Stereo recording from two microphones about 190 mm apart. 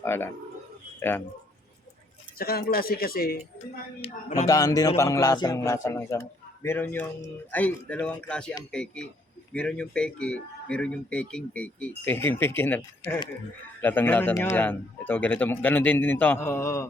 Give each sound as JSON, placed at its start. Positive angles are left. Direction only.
{"t": 0.0, "sound": "speech", "side_deg": 10}
{"t": 2.4, "sound": "speech", "side_deg": 50}
{"t": 4.0, "sound": "speech", "side_deg": 35}
{"t": 4.4, "sound": "speech", "side_deg": 20}